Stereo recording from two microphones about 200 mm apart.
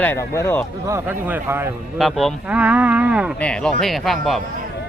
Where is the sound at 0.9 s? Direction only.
10° right (ahead or behind).